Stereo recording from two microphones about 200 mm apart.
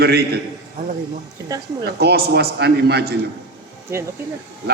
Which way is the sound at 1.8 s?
55° right (ahead or behind).